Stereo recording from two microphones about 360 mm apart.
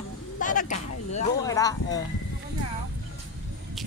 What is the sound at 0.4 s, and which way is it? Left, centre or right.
Speech, left.